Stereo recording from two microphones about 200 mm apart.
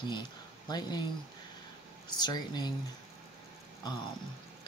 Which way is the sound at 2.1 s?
20° left (ahead or behind).